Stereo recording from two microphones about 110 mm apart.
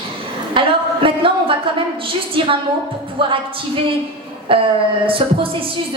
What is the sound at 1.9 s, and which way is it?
A woman's voice, 50° right (ahead or behind).